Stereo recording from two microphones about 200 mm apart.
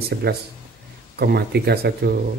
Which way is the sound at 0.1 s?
55° right (ahead or behind).